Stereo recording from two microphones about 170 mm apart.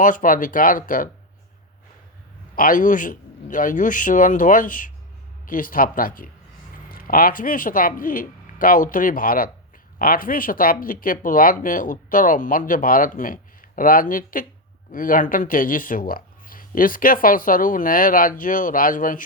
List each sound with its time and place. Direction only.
0.0 s a man's voice: 50° left (ahead or behind)
2.6 s a man's voice: 55° left (ahead or behind)